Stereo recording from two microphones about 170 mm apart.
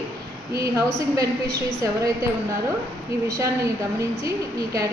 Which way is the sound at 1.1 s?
20° right (ahead or behind).